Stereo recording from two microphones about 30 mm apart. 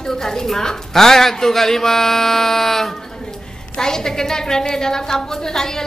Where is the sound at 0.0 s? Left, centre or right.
Centre.